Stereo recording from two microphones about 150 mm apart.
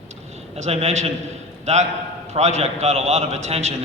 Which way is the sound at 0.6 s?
45° right (ahead or behind).